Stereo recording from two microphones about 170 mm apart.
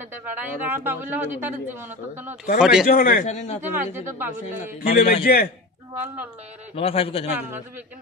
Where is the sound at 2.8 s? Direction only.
60° left (ahead or behind); by 3.6 s 45° left (ahead or behind).